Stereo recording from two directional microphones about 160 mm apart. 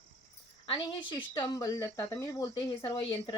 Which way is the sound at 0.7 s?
30° left (ahead or behind).